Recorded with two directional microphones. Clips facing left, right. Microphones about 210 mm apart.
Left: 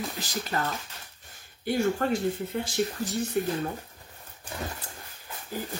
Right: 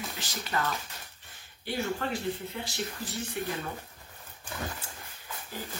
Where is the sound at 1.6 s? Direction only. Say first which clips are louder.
Left 6 dB; 50° left (ahead or behind).